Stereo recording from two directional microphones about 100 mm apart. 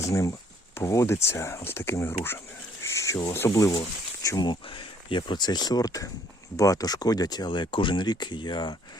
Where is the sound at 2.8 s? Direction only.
30° left (ahead or behind).